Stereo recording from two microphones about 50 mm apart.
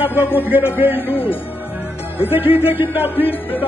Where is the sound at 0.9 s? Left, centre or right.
Left.